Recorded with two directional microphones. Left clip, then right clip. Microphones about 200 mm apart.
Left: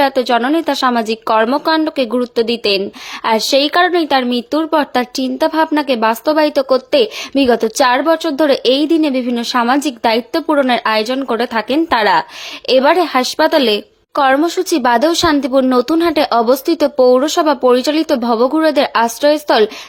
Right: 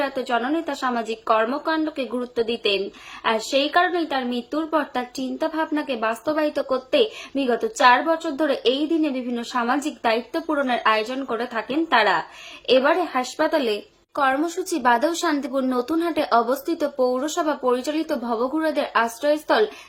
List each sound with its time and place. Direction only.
0.0 s speech: 50° left (ahead or behind)